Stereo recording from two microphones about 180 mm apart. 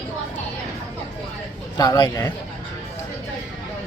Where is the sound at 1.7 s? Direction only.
20° left (ahead or behind).